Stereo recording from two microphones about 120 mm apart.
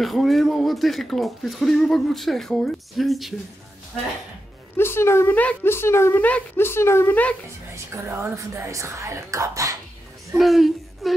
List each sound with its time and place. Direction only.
0.0 s speech: centre (ahead or behind)
4.7 s a woman's voice: 20° left (ahead or behind)
7.7 s speech: 25° right (ahead or behind)
10.3 s speech: centre (ahead or behind)